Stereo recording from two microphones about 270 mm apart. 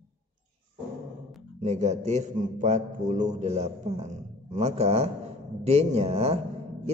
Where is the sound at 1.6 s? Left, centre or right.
Right.